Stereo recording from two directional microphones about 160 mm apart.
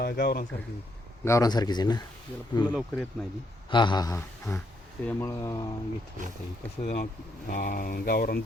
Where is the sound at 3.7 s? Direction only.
30° left (ahead or behind).